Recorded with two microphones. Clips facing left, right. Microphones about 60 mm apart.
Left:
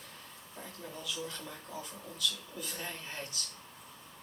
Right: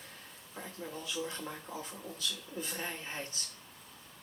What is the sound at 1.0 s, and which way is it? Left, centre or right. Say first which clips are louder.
Speech: right 2 dB; right.